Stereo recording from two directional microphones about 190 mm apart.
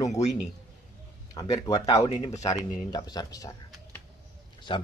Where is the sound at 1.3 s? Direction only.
20° left (ahead or behind).